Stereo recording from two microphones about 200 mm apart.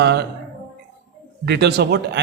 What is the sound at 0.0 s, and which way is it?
Speech, 55° right (ahead or behind).